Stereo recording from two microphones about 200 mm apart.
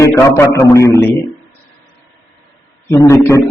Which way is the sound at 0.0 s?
15° left (ahead or behind).